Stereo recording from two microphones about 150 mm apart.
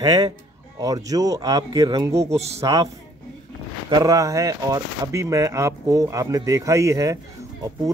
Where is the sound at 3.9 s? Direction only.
25° right (ahead or behind).